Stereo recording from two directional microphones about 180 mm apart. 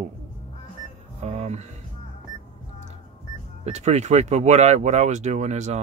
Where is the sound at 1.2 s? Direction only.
40° right (ahead or behind).